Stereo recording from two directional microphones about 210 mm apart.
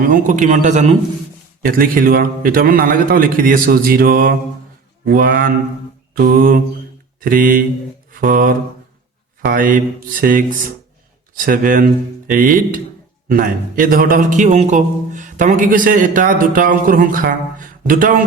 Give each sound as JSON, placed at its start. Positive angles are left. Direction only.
{"t": 0.1, "sound": "a man's voice", "side_deg": -40}
{"t": 11.4, "sound": "a man's voice", "side_deg": -40}